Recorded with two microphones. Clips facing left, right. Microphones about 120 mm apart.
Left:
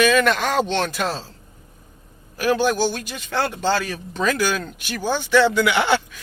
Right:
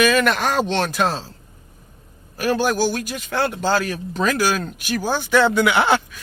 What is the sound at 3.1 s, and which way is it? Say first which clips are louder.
Speech: right 2 dB; 45° right (ahead or behind).